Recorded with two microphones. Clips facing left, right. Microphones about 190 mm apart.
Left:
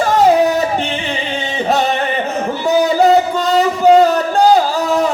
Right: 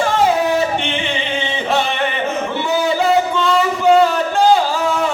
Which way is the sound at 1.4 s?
40° left (ahead or behind).